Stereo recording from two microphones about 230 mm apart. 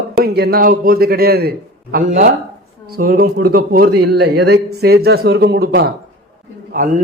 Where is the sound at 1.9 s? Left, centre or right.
Right.